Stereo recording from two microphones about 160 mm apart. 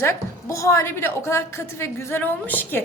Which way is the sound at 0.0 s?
15° left (ahead or behind).